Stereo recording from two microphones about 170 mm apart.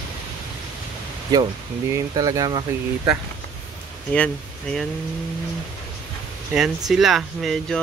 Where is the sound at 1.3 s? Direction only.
25° right (ahead or behind).